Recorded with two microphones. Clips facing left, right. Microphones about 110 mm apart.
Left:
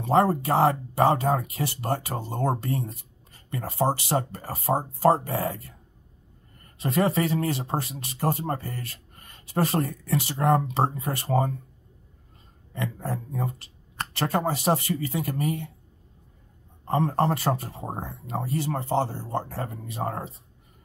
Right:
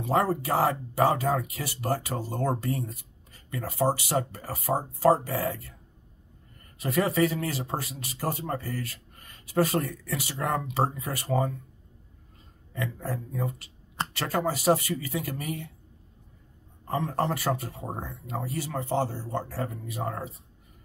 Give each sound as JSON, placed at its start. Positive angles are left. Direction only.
{"t": 0.0, "sound": "speech", "side_deg": 30}
{"t": 6.8, "sound": "speech", "side_deg": 30}
{"t": 12.7, "sound": "speech", "side_deg": 30}
{"t": 16.8, "sound": "speech", "side_deg": 30}